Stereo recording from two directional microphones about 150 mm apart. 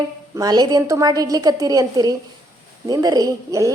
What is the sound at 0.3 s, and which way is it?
A woman's voice, 25° right (ahead or behind).